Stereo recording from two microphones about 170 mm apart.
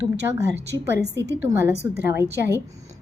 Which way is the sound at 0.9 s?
80° right.